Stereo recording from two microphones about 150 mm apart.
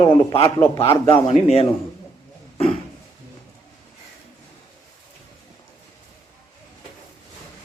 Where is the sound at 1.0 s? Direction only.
40° left (ahead or behind).